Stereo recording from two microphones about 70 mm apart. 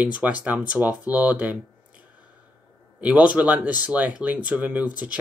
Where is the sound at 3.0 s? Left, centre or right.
Centre.